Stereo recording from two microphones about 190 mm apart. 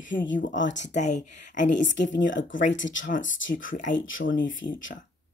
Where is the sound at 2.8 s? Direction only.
80° left.